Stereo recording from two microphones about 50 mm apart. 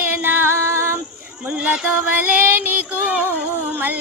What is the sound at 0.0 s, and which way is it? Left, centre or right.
Music, right.